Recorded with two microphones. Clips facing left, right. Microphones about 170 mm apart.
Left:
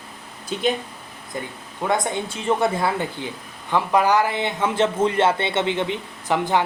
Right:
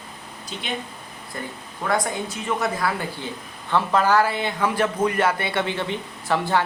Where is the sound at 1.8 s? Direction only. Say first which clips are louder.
Left 1 dB; 25° left (ahead or behind).